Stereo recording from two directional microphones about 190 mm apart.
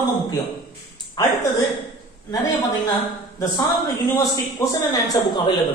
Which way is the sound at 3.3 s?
20° left (ahead or behind).